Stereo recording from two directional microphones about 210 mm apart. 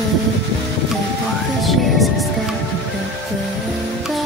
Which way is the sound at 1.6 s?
Centre (ahead or behind).